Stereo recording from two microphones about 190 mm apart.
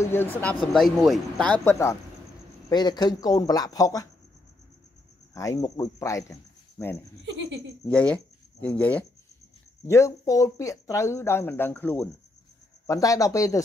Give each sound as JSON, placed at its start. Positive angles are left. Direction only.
{"t": 0.0, "sound": "speech", "side_deg": 10}
{"t": 5.3, "sound": "speech", "side_deg": 15}